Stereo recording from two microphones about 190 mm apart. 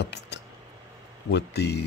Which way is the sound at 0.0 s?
65° left (ahead or behind).